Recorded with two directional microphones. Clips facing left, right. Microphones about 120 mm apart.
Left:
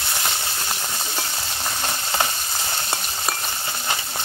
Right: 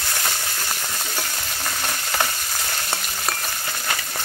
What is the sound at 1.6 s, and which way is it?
Frying, 20° left (ahead or behind).